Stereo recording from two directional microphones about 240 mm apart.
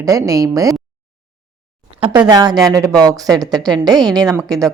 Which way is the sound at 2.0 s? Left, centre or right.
Centre.